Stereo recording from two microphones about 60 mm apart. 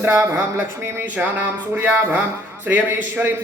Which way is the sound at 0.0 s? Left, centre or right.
Right.